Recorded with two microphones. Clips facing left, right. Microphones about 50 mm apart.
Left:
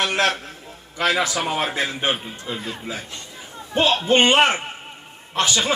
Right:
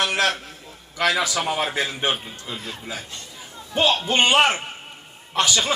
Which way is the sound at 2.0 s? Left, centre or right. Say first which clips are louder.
Left 1 dB; left.